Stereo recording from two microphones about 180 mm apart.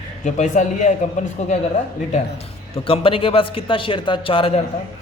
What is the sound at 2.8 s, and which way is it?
A man's voice, 30° left (ahead or behind).